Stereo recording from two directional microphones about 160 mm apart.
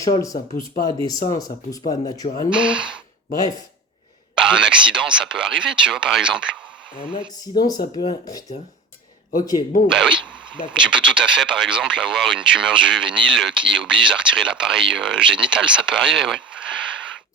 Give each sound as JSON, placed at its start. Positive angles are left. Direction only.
{"t": 0.0, "sound": "speech", "side_deg": 20}
{"t": 0.3, "sound": "speech", "side_deg": 60}
{"t": 1.4, "sound": "speech", "side_deg": 25}
{"t": 2.5, "sound": "speech", "side_deg": -5}
{"t": 4.4, "sound": "speech", "side_deg": -5}
{"t": 7.4, "sound": "speech", "side_deg": 25}
{"t": 9.8, "sound": "speech", "side_deg": -5}